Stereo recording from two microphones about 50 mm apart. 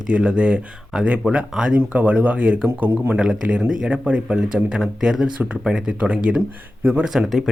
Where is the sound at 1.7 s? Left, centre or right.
Right.